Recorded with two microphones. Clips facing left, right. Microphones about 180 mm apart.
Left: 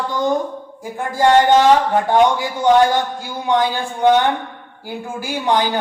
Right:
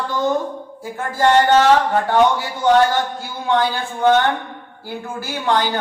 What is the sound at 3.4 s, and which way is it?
Speech, 15° left (ahead or behind).